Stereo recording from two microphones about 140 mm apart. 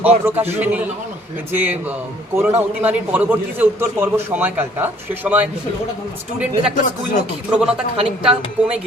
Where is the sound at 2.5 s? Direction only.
15° right (ahead or behind).